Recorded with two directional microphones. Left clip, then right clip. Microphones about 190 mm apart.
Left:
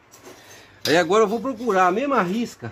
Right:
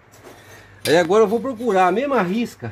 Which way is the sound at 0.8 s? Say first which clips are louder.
Right 3 dB; 10° right (ahead or behind).